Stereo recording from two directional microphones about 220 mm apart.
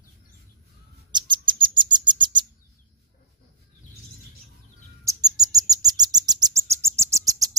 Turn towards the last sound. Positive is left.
turn(degrees=-15)  # may be behind; listen again after turning